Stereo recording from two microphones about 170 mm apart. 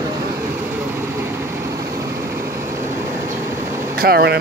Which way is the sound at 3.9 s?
65° right (ahead or behind).